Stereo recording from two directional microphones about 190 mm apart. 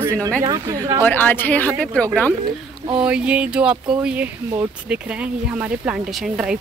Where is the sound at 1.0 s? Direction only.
10° left (ahead or behind).